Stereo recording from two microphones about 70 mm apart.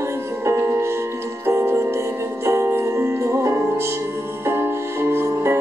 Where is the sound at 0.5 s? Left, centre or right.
Right.